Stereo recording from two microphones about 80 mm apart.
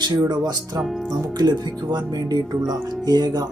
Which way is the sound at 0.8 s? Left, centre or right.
Centre.